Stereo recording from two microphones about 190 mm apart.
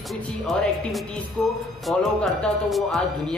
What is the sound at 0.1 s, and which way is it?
Speech, centre (ahead or behind).